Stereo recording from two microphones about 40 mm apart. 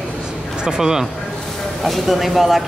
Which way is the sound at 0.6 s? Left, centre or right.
Centre.